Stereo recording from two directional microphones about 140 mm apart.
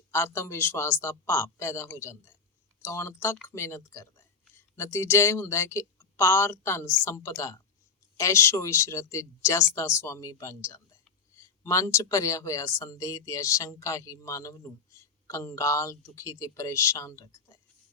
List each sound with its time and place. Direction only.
0.1 s speech: 20° left (ahead or behind)